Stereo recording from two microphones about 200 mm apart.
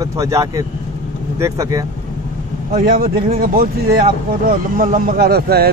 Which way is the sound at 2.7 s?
45° right (ahead or behind).